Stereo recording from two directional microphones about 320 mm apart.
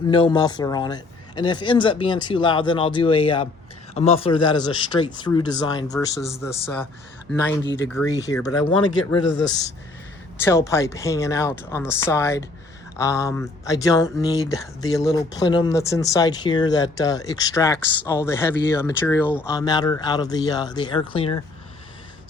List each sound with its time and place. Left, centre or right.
0.1 s speech: centre
8.1 s speech: centre
10.3 s speech: centre